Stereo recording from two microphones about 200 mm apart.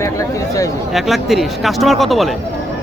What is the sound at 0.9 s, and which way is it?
Speech, centre (ahead or behind).